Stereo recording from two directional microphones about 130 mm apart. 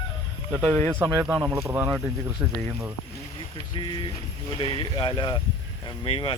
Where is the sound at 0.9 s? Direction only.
15° right (ahead or behind).